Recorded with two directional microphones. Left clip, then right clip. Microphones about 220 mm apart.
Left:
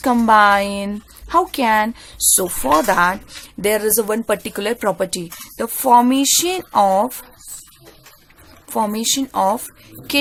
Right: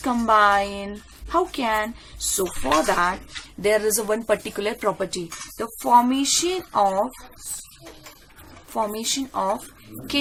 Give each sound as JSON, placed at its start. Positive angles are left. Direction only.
{"t": 0.0, "sound": "speech", "side_deg": 45}
{"t": 8.7, "sound": "speech", "side_deg": 45}